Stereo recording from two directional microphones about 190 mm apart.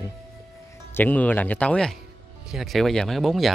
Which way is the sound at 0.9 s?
10° left (ahead or behind).